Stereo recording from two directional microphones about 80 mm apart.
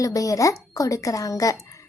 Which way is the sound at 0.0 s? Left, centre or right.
Left.